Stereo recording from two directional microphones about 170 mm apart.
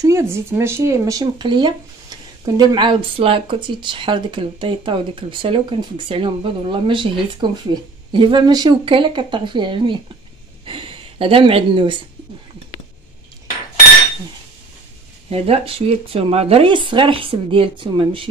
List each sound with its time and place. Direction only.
0.0 s speech: 15° right (ahead or behind)
15.2 s speech: 35° right (ahead or behind)